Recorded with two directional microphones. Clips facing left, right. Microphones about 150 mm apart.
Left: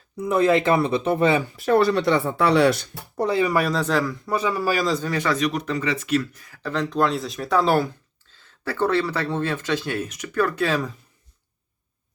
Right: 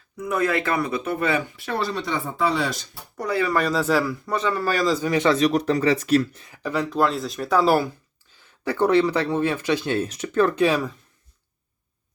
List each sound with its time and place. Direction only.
0.2 s speech: 25° left (ahead or behind)
1.5 s speech: 40° left (ahead or behind)
1.8 s speech: 65° left (ahead or behind)
3.2 s speech: 25° left (ahead or behind)
3.5 s speech: 5° left (ahead or behind)
3.8 s speech: 5° right (ahead or behind)
4.4 s a man's voice: 10° left (ahead or behind)
5.0 s speech: 20° right (ahead or behind)
5.4 s speech: 35° right (ahead or behind)
6.4 s speech: 15° right (ahead or behind)
10.0 s speech: 30° right (ahead or behind); by 10.8 s 15° right (ahead or behind)